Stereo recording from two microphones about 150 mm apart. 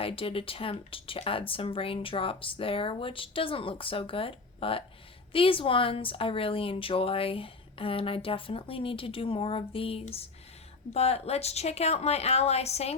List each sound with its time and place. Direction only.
0.0 s a woman's voice: 40° left (ahead or behind)